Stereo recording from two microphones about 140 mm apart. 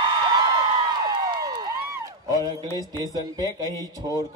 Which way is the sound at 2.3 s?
25° right (ahead or behind).